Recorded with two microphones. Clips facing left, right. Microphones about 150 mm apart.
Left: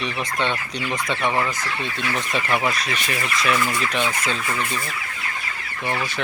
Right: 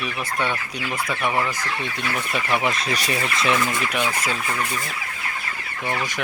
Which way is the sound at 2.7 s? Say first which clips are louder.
Right 2 dB; 35° right (ahead or behind).